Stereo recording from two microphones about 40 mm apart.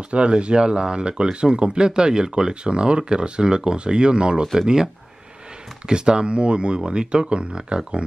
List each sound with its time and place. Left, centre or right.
0.1 s speech: right
5.9 s speech: right